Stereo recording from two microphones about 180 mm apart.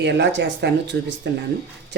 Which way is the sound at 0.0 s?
75° right (ahead or behind).